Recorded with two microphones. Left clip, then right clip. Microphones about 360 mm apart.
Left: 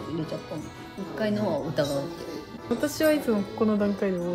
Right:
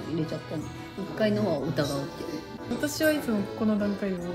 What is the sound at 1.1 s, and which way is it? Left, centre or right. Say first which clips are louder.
Speech: right 1 dB; centre.